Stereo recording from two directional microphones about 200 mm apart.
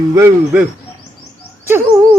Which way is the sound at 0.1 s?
15° right (ahead or behind).